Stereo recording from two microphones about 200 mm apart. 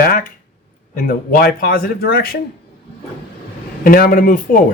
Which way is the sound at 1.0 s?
45° left (ahead or behind).